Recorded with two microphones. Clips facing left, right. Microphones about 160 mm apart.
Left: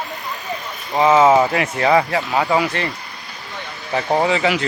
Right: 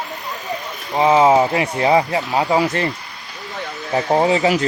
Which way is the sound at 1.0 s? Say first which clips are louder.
Even; 25° right (ahead or behind).